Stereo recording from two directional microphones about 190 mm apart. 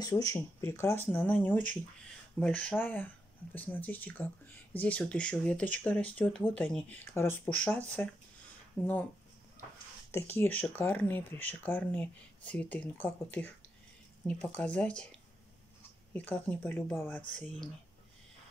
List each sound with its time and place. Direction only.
0.0 s speech: 15° left (ahead or behind)
10.1 s speech: 10° left (ahead or behind)